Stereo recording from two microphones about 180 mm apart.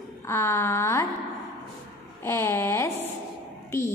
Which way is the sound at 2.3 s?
15° left (ahead or behind).